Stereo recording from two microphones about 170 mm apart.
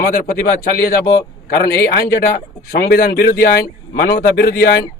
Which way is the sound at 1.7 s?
60° left (ahead or behind).